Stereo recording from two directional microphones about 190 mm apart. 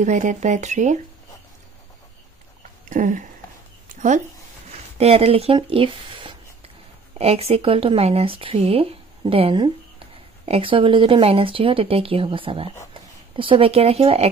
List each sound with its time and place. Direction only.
0.0 s speech: 40° right (ahead or behind)
2.9 s a sound: 45° right (ahead or behind)
4.6 s speech: 35° right (ahead or behind)